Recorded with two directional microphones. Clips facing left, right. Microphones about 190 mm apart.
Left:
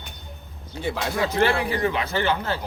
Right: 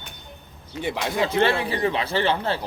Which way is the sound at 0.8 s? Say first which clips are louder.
Right 1 dB; 25° right (ahead or behind).